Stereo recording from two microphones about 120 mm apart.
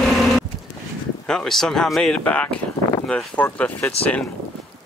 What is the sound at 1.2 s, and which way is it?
Speech, 5° left (ahead or behind).